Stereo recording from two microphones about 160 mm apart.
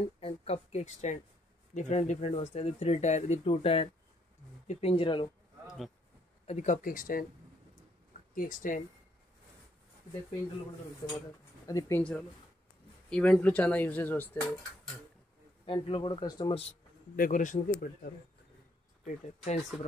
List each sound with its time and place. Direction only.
0.2 s speech: 40° left (ahead or behind)
6.4 s a man's voice: 50° left (ahead or behind)
8.4 s a man's voice: 60° left (ahead or behind)
11.0 s speech: 30° left (ahead or behind)
13.1 s speech: 5° left (ahead or behind)
15.6 s speech: 35° left (ahead or behind)
17.1 s a man's voice: 55° left (ahead or behind)